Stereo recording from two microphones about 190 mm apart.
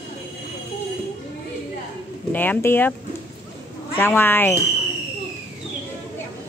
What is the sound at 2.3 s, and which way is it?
Speech, 10° left (ahead or behind).